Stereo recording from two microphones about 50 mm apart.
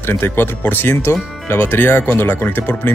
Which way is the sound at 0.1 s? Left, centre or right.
Left.